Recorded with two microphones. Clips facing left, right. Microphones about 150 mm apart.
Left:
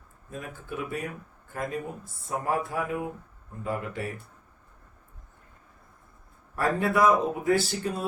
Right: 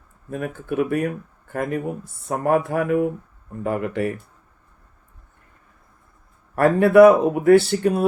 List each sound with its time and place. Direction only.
0.3 s speech: 65° right (ahead or behind)
6.6 s speech: 65° right (ahead or behind)